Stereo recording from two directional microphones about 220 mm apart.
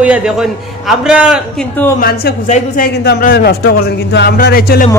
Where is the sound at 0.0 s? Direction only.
5° right (ahead or behind).